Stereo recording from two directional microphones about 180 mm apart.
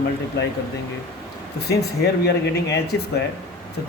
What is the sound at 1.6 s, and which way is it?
Speech, 65° left (ahead or behind).